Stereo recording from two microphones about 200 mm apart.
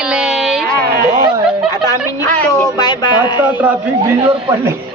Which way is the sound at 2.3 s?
5° left (ahead or behind).